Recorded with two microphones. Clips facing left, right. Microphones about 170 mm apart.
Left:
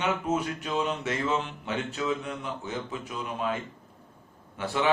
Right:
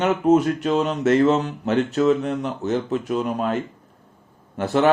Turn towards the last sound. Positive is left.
turn(degrees=-50)  # may be behind; listen again after turning